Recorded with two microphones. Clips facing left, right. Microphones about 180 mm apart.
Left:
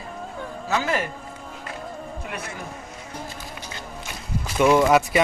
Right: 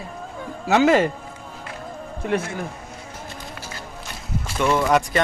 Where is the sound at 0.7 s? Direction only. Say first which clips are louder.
Right 9 dB; 75° right (ahead or behind).